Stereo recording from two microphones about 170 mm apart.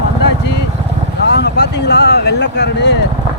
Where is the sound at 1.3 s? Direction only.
80° left.